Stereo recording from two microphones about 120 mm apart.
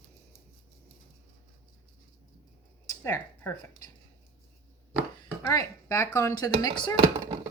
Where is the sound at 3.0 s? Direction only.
20° left (ahead or behind).